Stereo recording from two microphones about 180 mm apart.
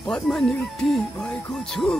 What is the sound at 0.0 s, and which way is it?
Speech, centre (ahead or behind).